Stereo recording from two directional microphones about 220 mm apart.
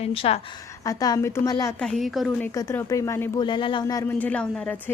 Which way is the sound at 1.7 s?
Centre (ahead or behind).